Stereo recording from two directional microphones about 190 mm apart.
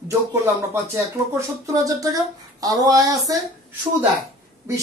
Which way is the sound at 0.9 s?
15° right (ahead or behind).